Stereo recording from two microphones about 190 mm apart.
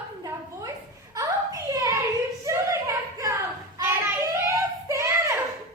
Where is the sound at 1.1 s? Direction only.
15° right (ahead or behind).